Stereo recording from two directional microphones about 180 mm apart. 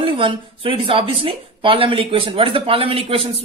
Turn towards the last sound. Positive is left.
turn(degrees=-30)  # may be behind; listen again after turning